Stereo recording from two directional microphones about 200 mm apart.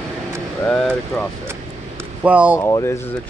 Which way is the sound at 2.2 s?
5° right (ahead or behind).